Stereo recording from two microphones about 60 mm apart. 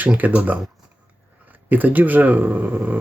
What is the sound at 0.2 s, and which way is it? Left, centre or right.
Speech, right.